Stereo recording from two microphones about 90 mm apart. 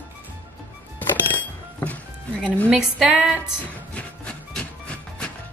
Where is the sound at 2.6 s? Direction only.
5° right (ahead or behind).